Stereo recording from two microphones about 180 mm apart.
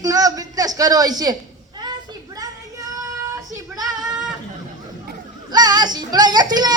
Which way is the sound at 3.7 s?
20° right (ahead or behind).